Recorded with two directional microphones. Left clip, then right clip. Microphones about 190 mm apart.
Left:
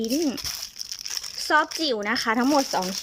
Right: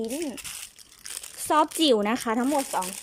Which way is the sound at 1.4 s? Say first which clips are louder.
Right 1 dB; 15° right (ahead or behind).